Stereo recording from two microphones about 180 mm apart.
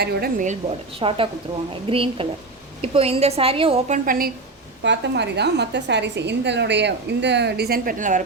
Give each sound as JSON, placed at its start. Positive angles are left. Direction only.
{"t": 0.0, "sound": "a woman's voice", "side_deg": -60}
{"t": 0.9, "sound": "a woman's voice", "side_deg": -30}
{"t": 4.8, "sound": "a woman's voice", "side_deg": -75}